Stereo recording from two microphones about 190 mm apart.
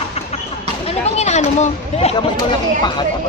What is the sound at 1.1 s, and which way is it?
Speech, 35° left (ahead or behind).